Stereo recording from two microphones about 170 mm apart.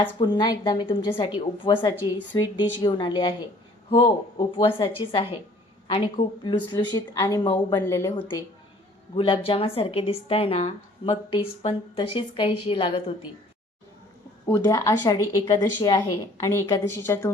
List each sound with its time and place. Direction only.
0.2 s a woman's voice: 25° left (ahead or behind)
6.7 s a woman's voice: 25° left (ahead or behind)
14.4 s a woman's voice: 15° left (ahead or behind)